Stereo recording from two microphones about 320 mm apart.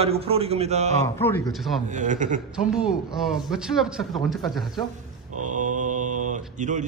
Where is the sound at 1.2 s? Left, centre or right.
Centre.